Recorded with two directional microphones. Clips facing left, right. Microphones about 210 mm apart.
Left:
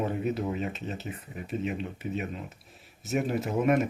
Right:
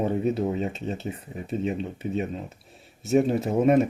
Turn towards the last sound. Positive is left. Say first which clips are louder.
# right 5 dB
turn(degrees=-30)  # may be behind; listen again after turning